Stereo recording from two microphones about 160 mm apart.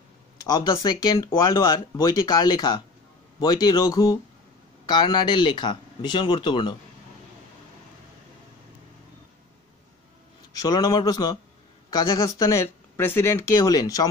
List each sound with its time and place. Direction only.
0.4 s speech: 25° left (ahead or behind)
10.6 s speech: 25° left (ahead or behind)